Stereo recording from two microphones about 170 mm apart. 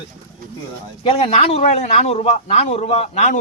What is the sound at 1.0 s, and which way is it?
A man's voice, 35° left (ahead or behind).